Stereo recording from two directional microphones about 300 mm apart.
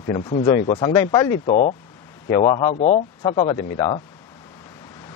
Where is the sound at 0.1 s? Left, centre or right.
Centre.